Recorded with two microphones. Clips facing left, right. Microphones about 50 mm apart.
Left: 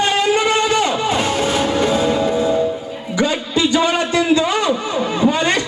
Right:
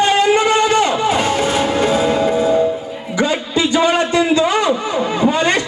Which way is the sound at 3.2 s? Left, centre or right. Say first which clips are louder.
Right 1 dB; centre.